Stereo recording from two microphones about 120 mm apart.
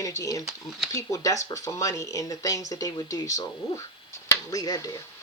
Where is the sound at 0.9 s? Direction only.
25° left (ahead or behind).